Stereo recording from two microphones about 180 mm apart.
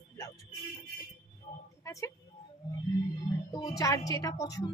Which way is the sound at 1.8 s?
15° left (ahead or behind).